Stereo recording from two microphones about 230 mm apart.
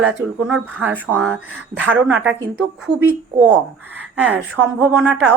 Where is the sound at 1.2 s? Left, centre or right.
Right.